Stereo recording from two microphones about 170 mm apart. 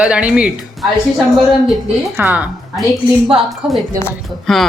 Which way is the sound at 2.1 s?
10° right (ahead or behind).